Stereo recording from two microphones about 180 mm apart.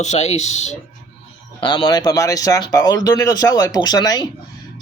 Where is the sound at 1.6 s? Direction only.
25° left (ahead or behind).